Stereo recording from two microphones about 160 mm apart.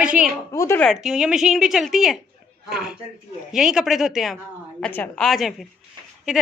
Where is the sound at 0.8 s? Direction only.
Centre (ahead or behind).